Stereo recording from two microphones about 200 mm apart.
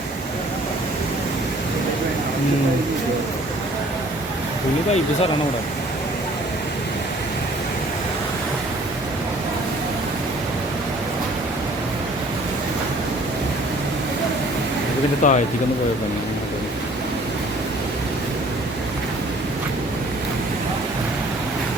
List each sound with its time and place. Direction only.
15.2 s speech: 40° left (ahead or behind)